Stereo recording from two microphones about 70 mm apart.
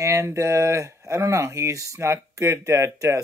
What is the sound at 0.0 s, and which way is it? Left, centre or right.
Speech, right.